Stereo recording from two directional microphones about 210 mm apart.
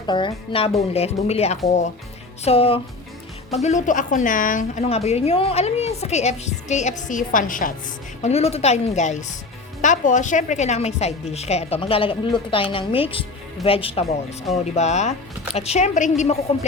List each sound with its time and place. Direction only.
0.1 s a woman's voice: 25° left (ahead or behind)